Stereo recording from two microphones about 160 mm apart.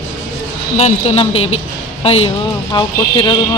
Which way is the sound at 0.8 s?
40° left (ahead or behind).